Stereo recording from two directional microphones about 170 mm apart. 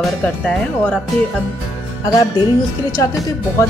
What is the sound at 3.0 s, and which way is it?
Speech, 20° left (ahead or behind).